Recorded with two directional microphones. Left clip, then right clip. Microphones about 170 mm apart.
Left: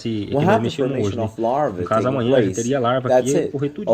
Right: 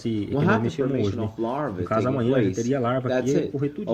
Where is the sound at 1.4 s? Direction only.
25° left (ahead or behind).